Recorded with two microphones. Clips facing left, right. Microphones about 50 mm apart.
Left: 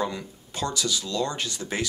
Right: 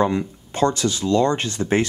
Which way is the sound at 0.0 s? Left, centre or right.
Right.